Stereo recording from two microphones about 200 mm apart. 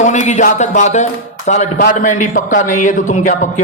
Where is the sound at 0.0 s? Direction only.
35° left (ahead or behind).